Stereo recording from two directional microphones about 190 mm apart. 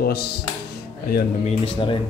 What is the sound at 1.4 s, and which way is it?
Speech, 30° left (ahead or behind).